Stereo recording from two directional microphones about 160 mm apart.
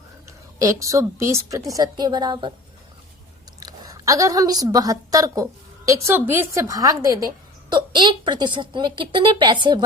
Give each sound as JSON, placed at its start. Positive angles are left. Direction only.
{"t": 0.3, "sound": "a woman's voice", "side_deg": -20}
{"t": 3.6, "sound": "a woman's voice", "side_deg": -20}